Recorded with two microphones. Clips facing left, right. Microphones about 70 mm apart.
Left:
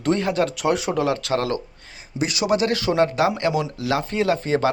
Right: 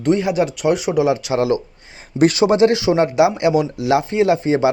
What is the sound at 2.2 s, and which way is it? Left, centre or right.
Speech, right.